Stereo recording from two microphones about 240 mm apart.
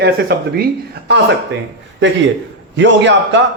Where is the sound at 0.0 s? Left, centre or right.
Right.